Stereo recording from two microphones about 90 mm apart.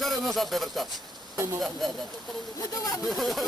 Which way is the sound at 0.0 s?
Centre (ahead or behind).